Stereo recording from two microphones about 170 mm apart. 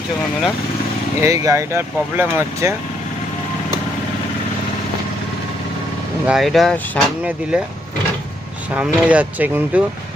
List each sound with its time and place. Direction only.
1.2 s speech: 20° right (ahead or behind)
6.2 s speech: centre (ahead or behind)
8.7 s speech: 10° right (ahead or behind)